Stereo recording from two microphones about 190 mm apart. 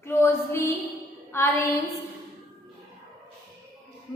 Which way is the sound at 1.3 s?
15° left (ahead or behind).